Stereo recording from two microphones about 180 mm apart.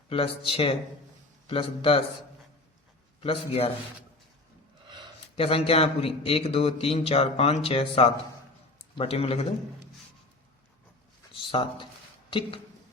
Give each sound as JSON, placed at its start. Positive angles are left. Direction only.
{"t": 0.1, "sound": "a man's voice", "side_deg": 30}
{"t": 3.2, "sound": "a man's voice", "side_deg": 30}
{"t": 5.4, "sound": "a man's voice", "side_deg": 30}
{"t": 11.3, "sound": "speech", "side_deg": 30}